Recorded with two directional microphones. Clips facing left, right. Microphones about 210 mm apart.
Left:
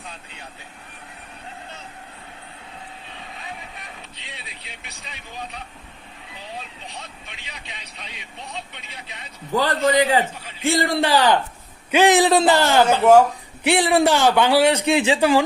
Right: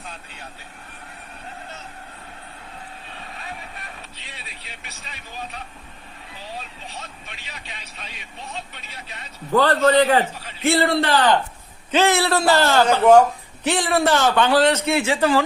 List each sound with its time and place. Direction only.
3.4 s vehicle: 20° left (ahead or behind)
9.6 s a man's voice: 15° left (ahead or behind)